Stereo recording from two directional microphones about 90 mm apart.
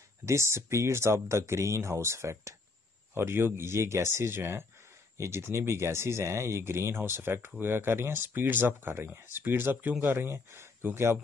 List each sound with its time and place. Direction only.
0.2 s speech: 30° right (ahead or behind)